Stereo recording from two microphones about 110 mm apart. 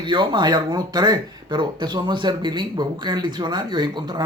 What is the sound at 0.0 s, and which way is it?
Speech, 45° right (ahead or behind).